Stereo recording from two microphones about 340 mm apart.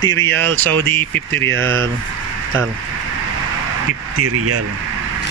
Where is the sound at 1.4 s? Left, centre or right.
Right.